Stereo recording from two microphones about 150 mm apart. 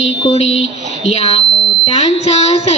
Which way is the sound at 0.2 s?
40° left (ahead or behind).